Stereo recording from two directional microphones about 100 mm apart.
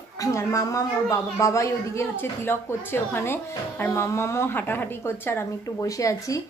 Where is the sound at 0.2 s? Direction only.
35° left (ahead or behind).